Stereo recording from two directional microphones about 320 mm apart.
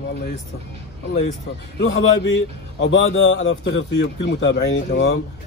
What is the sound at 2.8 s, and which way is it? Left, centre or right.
A man's voice, left.